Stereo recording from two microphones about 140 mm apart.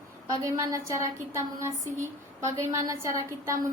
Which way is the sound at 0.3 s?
25° right (ahead or behind).